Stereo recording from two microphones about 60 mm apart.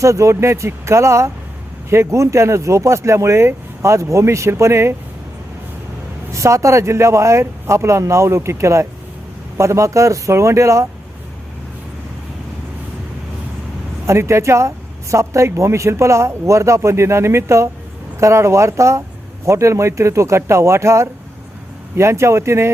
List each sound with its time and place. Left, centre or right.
0.0 s speech: right
6.3 s speech: right
14.1 s speech: right